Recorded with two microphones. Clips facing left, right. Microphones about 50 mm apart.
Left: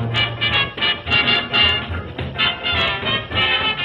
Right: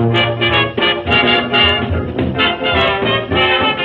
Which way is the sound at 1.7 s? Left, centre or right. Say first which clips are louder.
Right 8 dB; centre.